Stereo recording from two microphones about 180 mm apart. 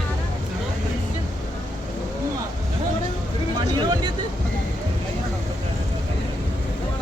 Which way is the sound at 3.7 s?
25° right (ahead or behind).